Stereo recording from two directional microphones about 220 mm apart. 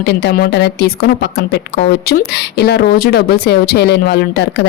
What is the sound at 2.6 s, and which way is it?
Speech, 45° left (ahead or behind).